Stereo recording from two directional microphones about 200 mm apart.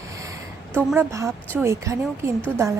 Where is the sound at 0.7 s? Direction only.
10° right (ahead or behind).